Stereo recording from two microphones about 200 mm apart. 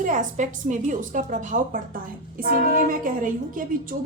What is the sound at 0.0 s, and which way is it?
A woman's voice, 40° right (ahead or behind).